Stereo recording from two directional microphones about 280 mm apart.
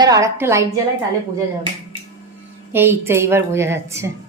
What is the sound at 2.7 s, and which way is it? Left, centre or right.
A woman's voice, centre.